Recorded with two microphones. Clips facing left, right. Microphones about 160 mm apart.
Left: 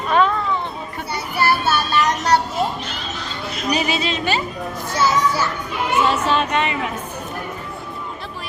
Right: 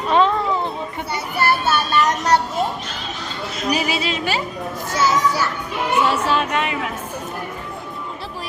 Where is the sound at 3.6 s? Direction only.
5° right (ahead or behind).